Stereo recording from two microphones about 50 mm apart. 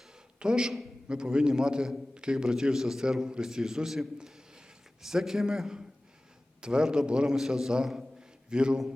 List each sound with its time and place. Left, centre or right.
0.3 s a man's voice: centre